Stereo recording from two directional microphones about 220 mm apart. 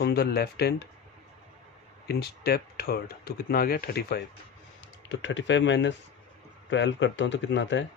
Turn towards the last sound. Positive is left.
turn(degrees=55)  # may be behind; listen again after turning